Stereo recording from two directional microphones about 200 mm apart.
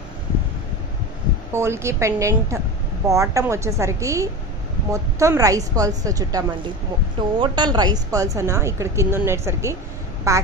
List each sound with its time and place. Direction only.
1.5 s a woman's voice: 15° right (ahead or behind)